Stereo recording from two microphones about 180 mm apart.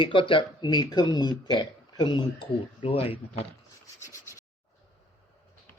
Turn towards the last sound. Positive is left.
turn(degrees=15)  # may be behind; listen again after turning